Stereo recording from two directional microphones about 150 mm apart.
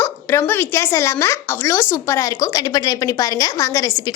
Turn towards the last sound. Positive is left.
turn(degrees=25)  # may be behind; listen again after turning